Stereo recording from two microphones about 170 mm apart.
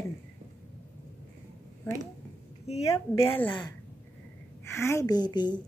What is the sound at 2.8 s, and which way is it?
Speech, 15° left (ahead or behind).